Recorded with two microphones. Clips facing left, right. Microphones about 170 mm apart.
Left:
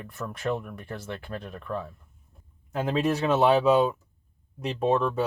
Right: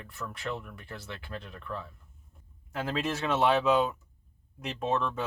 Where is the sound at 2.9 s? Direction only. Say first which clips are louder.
Left 6 dB; 35° left (ahead or behind).